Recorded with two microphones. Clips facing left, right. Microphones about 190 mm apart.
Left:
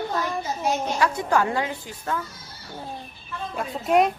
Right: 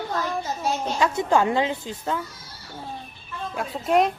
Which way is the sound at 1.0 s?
20° right (ahead or behind).